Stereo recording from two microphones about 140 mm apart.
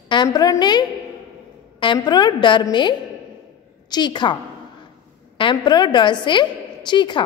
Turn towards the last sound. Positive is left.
turn(degrees=35)  # may be behind; listen again after turning